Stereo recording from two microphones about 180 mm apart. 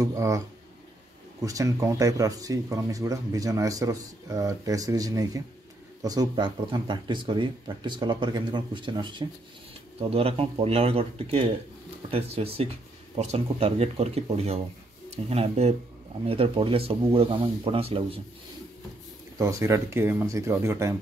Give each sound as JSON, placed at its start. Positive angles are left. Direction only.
{"t": 0.0, "sound": "speech", "side_deg": -20}
{"t": 1.4, "sound": "speech", "side_deg": -20}
{"t": 19.3, "sound": "speech", "side_deg": -15}